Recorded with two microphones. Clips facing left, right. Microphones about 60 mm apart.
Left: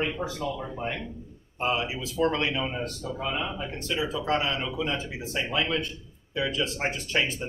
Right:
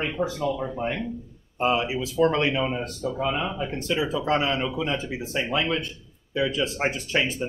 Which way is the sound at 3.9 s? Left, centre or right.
Right.